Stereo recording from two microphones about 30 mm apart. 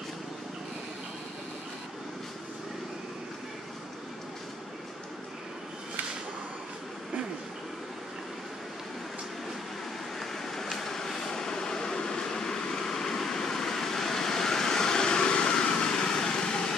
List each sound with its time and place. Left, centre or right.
10.1 s vehicle: centre